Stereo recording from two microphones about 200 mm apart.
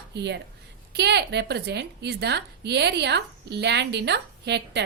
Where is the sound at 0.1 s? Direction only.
60° right (ahead or behind).